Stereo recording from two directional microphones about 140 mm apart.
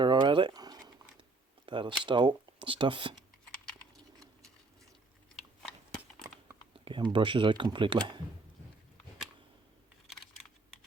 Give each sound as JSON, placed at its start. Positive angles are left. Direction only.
{"t": 0.0, "sound": "a sound", "side_deg": -35}
{"t": 1.6, "sound": "speech", "side_deg": -35}
{"t": 6.7, "sound": "speech", "side_deg": -35}
{"t": 10.1, "sound": "computer keyboard", "side_deg": 0}